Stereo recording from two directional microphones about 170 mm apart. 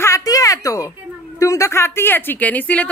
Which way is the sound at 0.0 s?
20° left (ahead or behind).